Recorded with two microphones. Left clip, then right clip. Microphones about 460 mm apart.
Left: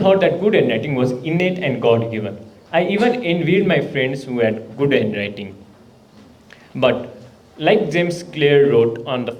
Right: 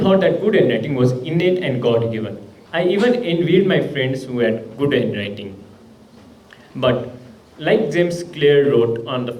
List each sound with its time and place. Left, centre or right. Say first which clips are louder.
0.0 s a man's voice: left 1 dB; left
7.6 s a man's voice: left 1 dB; left